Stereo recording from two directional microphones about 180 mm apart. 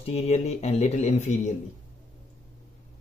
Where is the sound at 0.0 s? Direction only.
35° left (ahead or behind).